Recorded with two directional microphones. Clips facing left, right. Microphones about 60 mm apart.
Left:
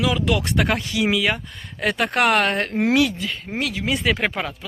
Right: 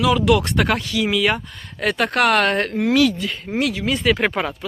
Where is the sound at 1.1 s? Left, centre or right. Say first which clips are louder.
Right 2 dB; centre.